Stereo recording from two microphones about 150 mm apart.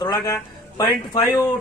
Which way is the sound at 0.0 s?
25° left (ahead or behind).